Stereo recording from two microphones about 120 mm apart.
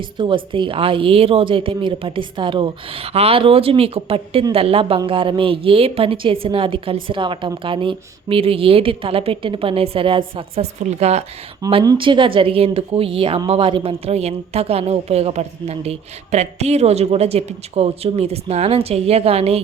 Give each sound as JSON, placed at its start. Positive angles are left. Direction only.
{"t": 0.0, "sound": "a woman's voice", "side_deg": -45}
{"t": 11.7, "sound": "a woman's voice", "side_deg": -40}